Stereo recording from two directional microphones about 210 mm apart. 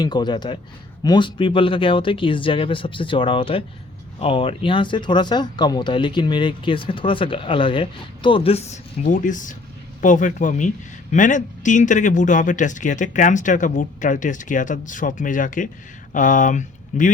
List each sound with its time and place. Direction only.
0.0 s speech: 20° left (ahead or behind); by 17.1 s 35° left (ahead or behind)